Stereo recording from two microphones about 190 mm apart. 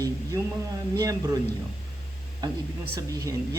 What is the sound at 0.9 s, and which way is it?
Speech, 20° right (ahead or behind).